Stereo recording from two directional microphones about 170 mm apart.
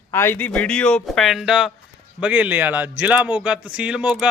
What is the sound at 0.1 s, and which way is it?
Speech, 15° left (ahead or behind).